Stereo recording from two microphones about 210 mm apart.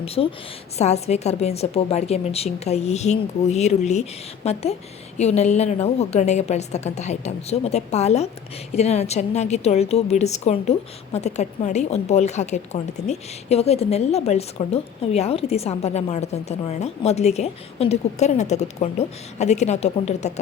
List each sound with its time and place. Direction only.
0.0 s a woman's voice: 25° left (ahead or behind)